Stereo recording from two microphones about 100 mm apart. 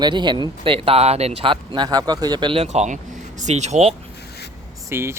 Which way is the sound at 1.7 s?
45° right (ahead or behind).